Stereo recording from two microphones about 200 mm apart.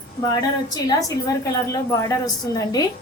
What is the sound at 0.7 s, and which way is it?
A woman's voice, 20° left (ahead or behind).